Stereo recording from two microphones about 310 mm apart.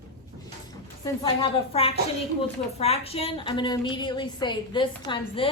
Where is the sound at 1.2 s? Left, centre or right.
Centre.